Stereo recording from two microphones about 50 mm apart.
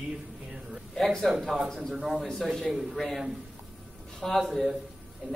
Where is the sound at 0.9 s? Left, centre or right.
Centre.